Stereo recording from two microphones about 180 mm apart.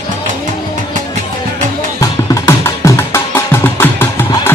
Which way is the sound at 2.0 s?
15° left (ahead or behind).